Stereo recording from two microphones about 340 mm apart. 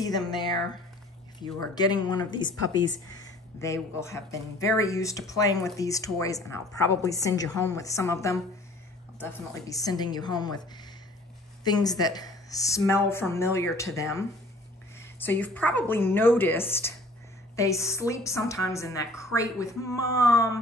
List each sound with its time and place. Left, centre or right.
0.0 s speech: centre